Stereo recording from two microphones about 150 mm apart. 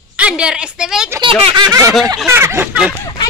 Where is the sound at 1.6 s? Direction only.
20° right (ahead or behind).